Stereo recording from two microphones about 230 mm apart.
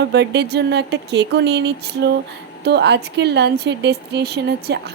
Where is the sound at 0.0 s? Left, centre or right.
Right.